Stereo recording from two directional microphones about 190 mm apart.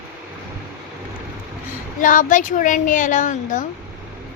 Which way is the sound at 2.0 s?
45° left (ahead or behind).